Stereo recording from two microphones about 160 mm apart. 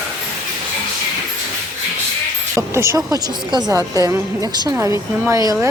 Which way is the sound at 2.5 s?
20° right (ahead or behind).